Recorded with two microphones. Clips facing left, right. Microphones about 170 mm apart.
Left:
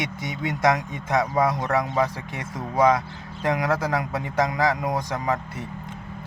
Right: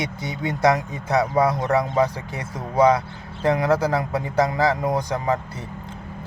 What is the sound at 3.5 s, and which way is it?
Speech, 30° right (ahead or behind).